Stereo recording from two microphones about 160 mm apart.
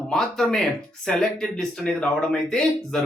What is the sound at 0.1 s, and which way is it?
Speech, centre (ahead or behind).